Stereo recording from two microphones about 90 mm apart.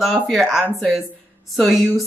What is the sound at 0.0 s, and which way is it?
Speech, 5° right (ahead or behind).